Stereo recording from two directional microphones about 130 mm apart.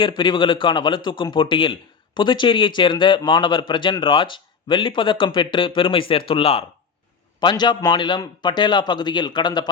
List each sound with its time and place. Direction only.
0.2 s speech: 40° left (ahead or behind)
7.3 s speech: 35° left (ahead or behind)